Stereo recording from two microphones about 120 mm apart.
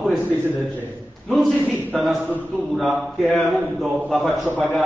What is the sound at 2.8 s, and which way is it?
A man's voice, centre (ahead or behind).